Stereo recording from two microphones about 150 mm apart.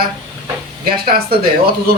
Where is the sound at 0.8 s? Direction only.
85° right.